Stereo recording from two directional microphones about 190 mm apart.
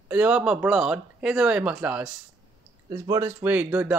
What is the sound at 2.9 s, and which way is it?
Speech, 15° right (ahead or behind).